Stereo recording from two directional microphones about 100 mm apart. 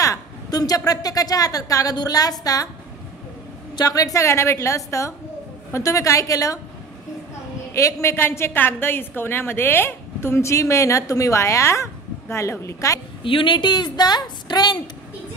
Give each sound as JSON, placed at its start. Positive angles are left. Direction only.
{"t": 0.0, "sound": "a woman's voice", "side_deg": 35}
{"t": 3.7, "sound": "a woman's voice", "side_deg": 40}
{"t": 7.7, "sound": "a woman's voice", "side_deg": 30}
{"t": 13.2, "sound": "a woman's voice", "side_deg": 60}